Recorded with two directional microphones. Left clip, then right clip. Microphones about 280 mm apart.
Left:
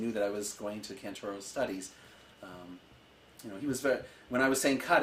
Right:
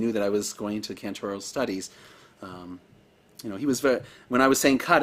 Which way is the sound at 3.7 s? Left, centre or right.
Right.